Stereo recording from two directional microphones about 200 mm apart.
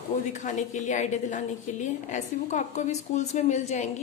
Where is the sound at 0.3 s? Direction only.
40° left (ahead or behind).